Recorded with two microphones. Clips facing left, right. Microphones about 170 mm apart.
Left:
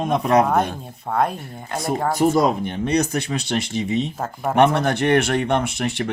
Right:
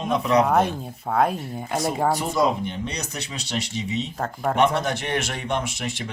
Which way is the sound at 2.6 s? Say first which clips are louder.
Left 9 dB; 55° left (ahead or behind).